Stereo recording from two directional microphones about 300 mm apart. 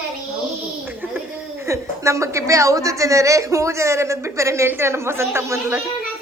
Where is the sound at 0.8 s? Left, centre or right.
Centre.